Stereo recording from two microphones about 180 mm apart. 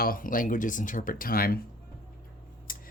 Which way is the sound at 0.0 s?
50° left (ahead or behind).